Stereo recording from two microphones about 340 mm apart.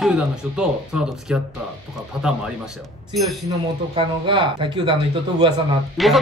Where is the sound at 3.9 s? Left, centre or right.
Centre.